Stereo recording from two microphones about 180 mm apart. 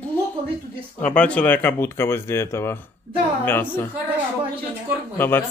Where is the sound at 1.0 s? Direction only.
5° left (ahead or behind).